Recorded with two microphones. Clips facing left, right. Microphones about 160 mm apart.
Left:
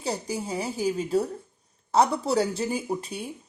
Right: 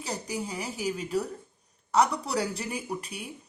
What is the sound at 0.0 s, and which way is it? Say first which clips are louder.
Speech: left 4 dB; 30° left (ahead or behind).